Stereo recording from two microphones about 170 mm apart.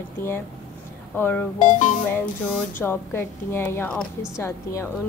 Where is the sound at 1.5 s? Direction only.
50° left (ahead or behind).